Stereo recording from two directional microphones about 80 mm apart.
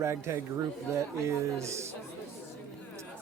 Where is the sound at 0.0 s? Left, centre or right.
Right.